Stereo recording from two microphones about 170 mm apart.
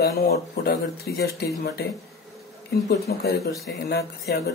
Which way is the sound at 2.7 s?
65° left (ahead or behind).